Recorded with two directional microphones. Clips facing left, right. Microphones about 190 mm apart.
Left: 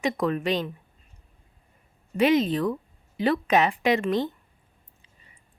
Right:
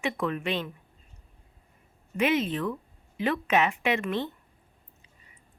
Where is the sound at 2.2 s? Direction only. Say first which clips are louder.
Left 5 dB; 35° left (ahead or behind).